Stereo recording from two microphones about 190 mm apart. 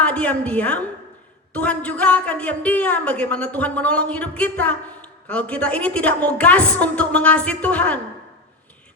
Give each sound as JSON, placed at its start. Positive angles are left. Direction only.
{"t": 0.0, "sound": "a woman's voice", "side_deg": 5}